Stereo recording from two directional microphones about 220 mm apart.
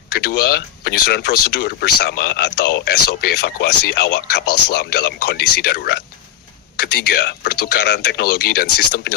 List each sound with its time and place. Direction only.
0.3 s speech: 45° left (ahead or behind)